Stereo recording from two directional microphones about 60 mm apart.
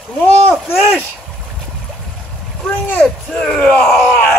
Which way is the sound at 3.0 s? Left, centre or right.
Centre.